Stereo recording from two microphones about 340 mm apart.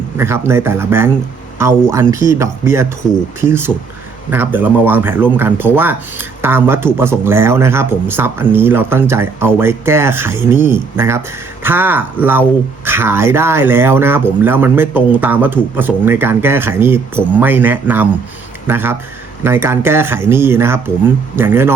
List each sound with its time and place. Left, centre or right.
0.2 s speech: centre